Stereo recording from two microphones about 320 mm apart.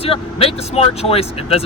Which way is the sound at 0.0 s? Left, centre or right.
Centre.